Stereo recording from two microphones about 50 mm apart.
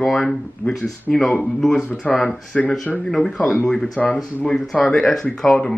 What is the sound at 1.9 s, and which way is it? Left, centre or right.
Speech, left.